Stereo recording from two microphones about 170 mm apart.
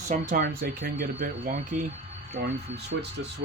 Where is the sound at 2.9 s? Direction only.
80° right.